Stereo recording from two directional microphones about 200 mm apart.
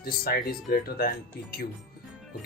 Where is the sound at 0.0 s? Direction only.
50° left (ahead or behind).